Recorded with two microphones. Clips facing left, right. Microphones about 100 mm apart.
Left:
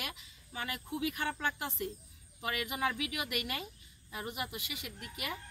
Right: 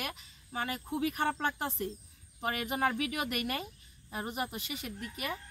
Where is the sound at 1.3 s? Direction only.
25° right (ahead or behind).